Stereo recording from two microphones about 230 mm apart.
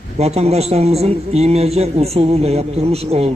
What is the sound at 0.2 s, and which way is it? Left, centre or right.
A man's voice, right.